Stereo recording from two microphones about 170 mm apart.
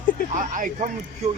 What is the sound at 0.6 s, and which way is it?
Speech, 50° right (ahead or behind).